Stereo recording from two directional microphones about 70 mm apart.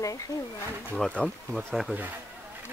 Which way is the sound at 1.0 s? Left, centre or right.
Centre.